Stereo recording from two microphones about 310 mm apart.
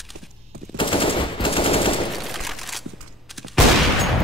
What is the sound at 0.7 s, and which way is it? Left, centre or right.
Machine gun, centre.